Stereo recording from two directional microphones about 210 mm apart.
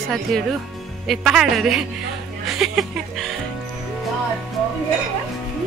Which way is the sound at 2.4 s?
Centre (ahead or behind).